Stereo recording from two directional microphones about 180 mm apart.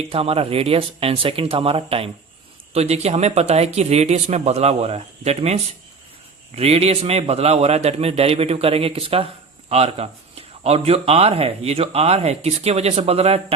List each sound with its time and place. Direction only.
0.1 s a man's voice: 30° right (ahead or behind)
6.6 s a man's voice: 35° right (ahead or behind)